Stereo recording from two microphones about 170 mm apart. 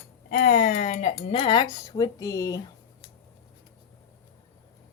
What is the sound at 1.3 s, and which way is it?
Speech, 30° left (ahead or behind).